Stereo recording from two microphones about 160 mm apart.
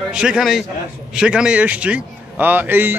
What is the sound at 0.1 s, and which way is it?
A man's voice, 5° right (ahead or behind).